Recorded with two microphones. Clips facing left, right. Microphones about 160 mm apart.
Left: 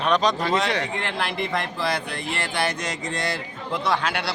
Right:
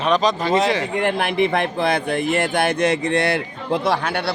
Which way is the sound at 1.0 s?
55° right (ahead or behind).